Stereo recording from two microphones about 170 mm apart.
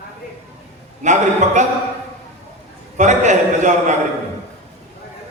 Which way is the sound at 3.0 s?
45° right (ahead or behind).